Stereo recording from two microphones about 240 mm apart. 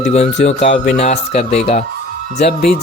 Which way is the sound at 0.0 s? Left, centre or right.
Left.